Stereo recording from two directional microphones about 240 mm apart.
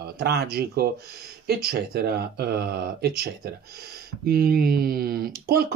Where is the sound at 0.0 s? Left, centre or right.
Right.